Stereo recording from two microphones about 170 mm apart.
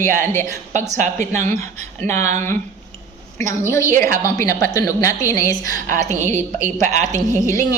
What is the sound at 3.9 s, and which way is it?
Speech, 15° left (ahead or behind).